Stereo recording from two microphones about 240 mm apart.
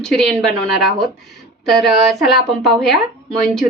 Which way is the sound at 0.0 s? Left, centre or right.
Centre.